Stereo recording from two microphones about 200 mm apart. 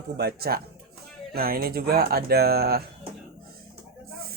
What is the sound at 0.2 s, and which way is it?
Speech, 50° right (ahead or behind).